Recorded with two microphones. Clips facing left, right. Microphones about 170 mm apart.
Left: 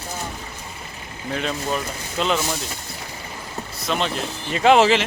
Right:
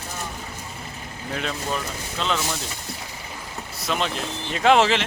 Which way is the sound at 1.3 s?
Centre (ahead or behind).